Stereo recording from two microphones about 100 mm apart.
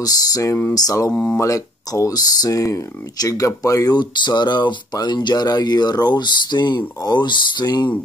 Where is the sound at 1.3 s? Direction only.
35° left (ahead or behind).